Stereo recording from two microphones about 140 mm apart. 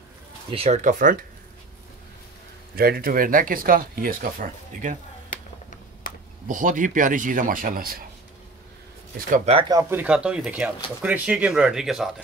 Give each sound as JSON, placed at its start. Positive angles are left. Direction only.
{"t": 0.5, "sound": "speech", "side_deg": -45}
{"t": 0.8, "sound": "speech", "side_deg": -70}
{"t": 2.7, "sound": "speech", "side_deg": -90}
{"t": 6.4, "sound": "speech", "side_deg": -70}
{"t": 9.7, "sound": "speech", "side_deg": -20}
{"t": 10.0, "sound": "speech", "side_deg": -5}